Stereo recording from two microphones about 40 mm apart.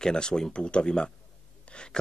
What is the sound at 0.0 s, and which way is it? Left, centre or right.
A man's voice, centre.